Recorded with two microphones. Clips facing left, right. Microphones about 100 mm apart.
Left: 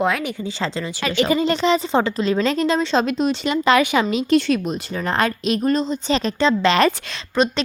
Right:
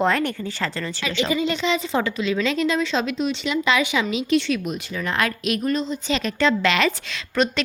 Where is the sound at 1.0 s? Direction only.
50° left (ahead or behind).